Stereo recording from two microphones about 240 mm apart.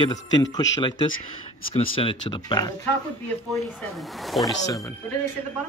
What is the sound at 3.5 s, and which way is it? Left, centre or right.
Speech, centre.